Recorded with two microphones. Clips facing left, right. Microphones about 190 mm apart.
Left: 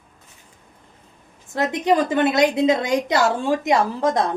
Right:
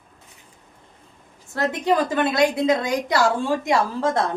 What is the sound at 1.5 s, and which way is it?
A woman's voice, 20° left (ahead or behind).